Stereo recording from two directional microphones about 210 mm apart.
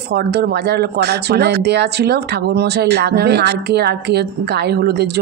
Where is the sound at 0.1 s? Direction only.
50° right (ahead or behind).